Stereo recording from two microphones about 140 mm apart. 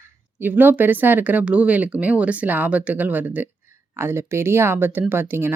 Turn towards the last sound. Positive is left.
turn(degrees=-15)  # may be behind; listen again after turning